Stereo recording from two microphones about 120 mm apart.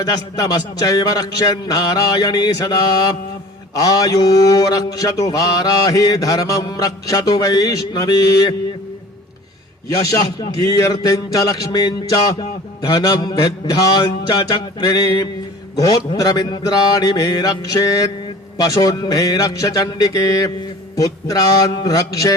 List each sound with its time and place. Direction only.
0.0 s mantra: 30° left (ahead or behind)
9.9 s mantra: 30° left (ahead or behind)